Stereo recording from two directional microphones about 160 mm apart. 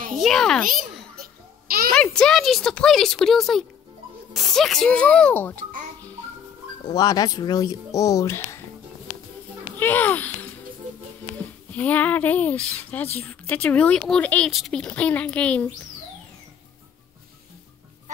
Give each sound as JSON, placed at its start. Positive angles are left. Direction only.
{"t": 0.2, "sound": "speech", "side_deg": 0}
{"t": 1.1, "sound": "babbling", "side_deg": -65}
{"t": 2.0, "sound": "speech", "side_deg": 5}
{"t": 6.9, "sound": "speech", "side_deg": 25}
{"t": 9.8, "sound": "a child's voice", "side_deg": 10}
{"t": 11.7, "sound": "speech", "side_deg": 10}